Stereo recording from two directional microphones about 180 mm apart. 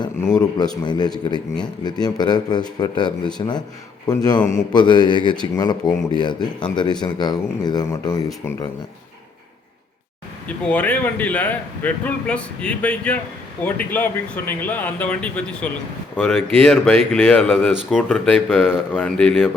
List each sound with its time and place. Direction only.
0.3 s speech: 20° left (ahead or behind)
10.6 s a man's voice: 5° left (ahead or behind)
17.7 s speech: 5° right (ahead or behind)
18.5 s speech: 10° left (ahead or behind)